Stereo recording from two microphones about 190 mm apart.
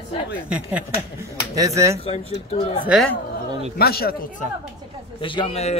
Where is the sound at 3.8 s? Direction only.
55° left (ahead or behind).